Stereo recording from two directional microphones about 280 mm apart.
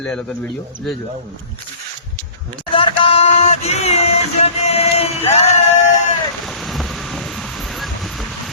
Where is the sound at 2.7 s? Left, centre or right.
Centre.